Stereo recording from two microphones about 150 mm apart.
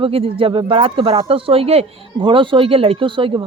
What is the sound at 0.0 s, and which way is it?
Speech, 40° right (ahead or behind).